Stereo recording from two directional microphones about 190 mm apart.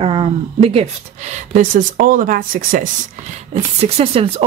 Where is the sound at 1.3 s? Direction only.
45° right (ahead or behind).